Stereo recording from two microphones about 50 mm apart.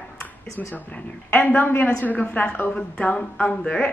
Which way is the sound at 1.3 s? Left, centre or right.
Left.